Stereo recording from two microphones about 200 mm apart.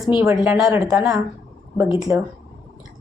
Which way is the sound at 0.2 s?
15° right (ahead or behind).